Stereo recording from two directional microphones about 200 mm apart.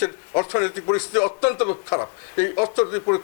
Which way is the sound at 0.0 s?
20° left (ahead or behind).